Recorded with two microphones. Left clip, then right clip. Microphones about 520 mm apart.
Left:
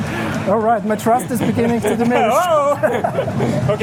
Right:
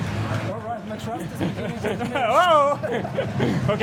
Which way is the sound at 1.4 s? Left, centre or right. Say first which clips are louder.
Left 10 dB; centre.